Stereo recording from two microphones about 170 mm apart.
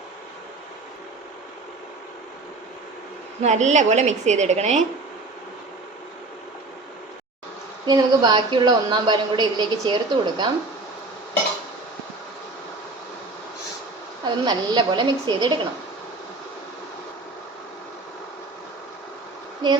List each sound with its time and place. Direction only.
3.4 s a woman's voice: 45° right (ahead or behind)
7.9 s a woman's voice: 25° right (ahead or behind)
14.3 s a woman's voice: 25° right (ahead or behind)